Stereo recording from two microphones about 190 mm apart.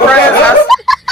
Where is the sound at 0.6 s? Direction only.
Centre (ahead or behind).